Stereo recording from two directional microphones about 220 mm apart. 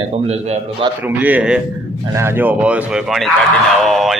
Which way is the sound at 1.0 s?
5° right (ahead or behind).